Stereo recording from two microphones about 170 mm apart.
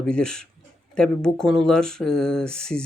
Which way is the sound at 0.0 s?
5° left (ahead or behind).